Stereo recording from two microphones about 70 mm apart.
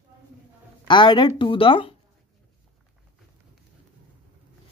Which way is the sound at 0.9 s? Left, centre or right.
Left.